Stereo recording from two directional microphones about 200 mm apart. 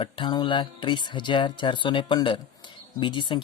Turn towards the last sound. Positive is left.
turn(degrees=25)  # may be behind; listen again after turning